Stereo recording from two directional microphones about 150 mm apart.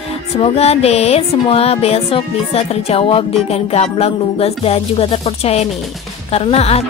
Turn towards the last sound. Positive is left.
turn(degrees=45)  # may be behind; listen again after turning